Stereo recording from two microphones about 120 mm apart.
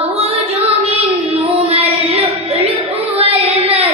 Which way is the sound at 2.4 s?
55° right (ahead or behind).